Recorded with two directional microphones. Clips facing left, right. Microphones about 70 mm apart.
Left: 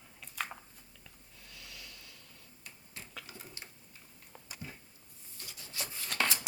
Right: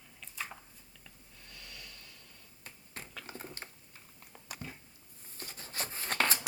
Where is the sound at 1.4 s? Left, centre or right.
Centre.